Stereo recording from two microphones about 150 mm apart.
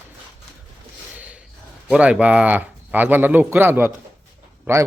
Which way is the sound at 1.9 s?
5° right (ahead or behind).